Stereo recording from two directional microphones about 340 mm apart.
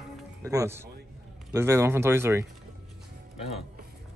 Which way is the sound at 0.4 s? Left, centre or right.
Centre.